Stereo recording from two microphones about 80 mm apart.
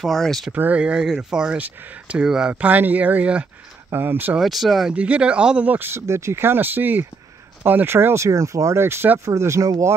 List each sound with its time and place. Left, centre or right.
0.0 s speech: centre
0.5 s speech: centre
1.6 s speech: centre
2.5 s speech: right
4.4 s speech: centre
4.9 s speech: centre; by 9.9 s right